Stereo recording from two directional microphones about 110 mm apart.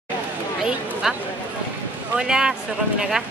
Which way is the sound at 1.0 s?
5° right (ahead or behind).